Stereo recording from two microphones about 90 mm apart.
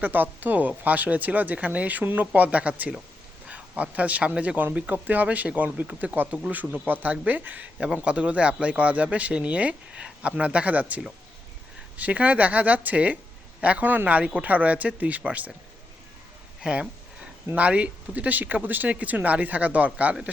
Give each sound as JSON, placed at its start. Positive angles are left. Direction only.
{"t": 0.0, "sound": "speech", "side_deg": -20}
{"t": 16.6, "sound": "speech", "side_deg": -10}